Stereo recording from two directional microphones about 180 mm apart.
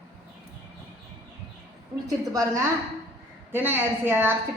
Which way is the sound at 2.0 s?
20° right (ahead or behind).